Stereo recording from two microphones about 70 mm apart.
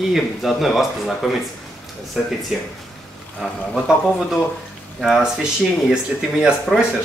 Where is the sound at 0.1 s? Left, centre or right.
Centre.